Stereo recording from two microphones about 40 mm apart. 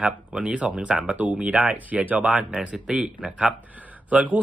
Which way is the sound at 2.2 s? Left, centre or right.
Right.